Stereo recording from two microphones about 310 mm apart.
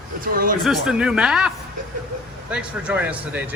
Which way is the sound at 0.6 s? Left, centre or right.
Centre.